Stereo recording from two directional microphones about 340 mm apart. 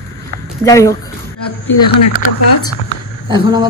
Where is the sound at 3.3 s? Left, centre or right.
Centre.